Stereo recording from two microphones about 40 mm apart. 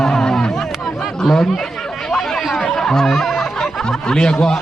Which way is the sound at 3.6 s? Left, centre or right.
Centre.